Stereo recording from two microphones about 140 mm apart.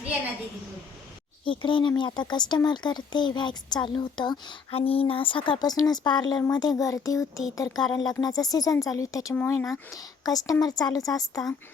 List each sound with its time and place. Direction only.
1.5 s speech: 35° left (ahead or behind)